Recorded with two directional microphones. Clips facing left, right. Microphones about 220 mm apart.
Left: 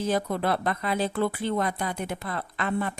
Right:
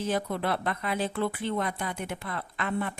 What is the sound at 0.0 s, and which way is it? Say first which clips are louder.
Speech: left 3 dB; 40° left (ahead or behind).